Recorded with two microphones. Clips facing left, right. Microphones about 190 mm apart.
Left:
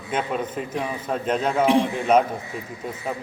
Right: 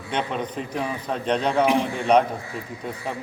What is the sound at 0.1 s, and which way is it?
A man's voice, 5° left (ahead or behind).